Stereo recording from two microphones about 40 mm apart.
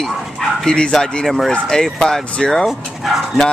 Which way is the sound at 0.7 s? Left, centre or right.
Left.